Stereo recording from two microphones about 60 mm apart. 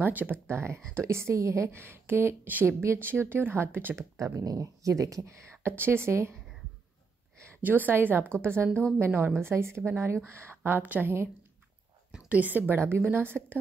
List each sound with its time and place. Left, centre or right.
0.0 s speech: right
0.5 s speech: right
4.2 s speech: right
5.6 s speech: right
7.6 s speech: right
10.8 s speech: right
12.3 s a woman's voice: right
12.7 s speech: right